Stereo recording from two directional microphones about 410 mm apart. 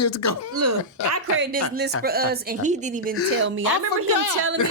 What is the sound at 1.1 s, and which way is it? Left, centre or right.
A woman's voice, right.